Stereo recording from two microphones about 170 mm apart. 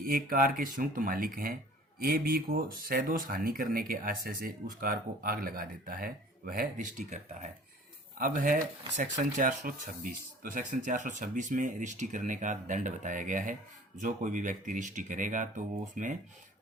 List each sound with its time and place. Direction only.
0.0 s speech: 55° right (ahead or behind)
8.2 s speech: 50° right (ahead or behind)